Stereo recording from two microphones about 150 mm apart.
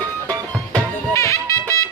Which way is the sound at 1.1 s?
20° left (ahead or behind).